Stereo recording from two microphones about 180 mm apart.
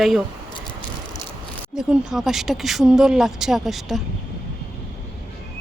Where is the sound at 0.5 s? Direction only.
25° left (ahead or behind).